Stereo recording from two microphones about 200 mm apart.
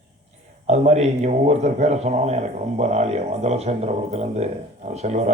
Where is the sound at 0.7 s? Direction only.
35° right (ahead or behind).